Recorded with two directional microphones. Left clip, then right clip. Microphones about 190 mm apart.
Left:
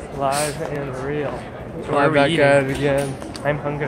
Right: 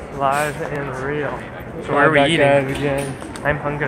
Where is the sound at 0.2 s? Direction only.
10° left (ahead or behind).